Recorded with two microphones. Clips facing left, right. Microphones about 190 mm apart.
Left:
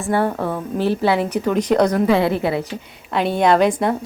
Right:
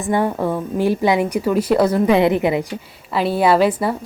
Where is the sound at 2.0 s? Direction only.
20° right (ahead or behind).